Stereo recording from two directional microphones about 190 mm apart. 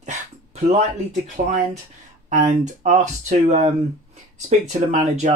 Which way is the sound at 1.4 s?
45° right (ahead or behind).